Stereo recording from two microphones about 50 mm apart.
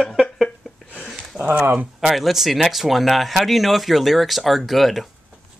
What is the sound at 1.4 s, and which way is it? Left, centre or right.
Speech, right.